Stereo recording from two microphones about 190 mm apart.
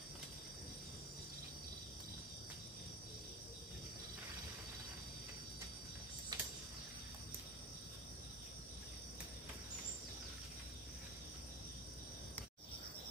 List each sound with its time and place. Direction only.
6.3 s tick-tock: 20° right (ahead or behind)